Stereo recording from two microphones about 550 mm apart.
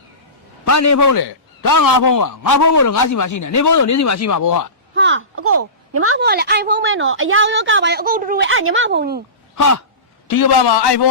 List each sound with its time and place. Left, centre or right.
0.6 s a man's voice: left
4.9 s a woman's voice: right
9.6 s a sound: left
10.2 s a man's voice: left